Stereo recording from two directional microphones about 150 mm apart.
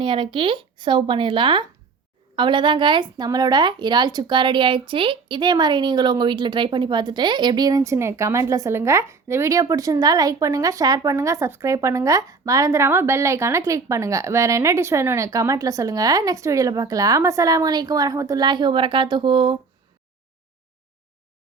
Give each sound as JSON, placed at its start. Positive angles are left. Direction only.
{"t": 0.0, "sound": "a woman's voice", "side_deg": -35}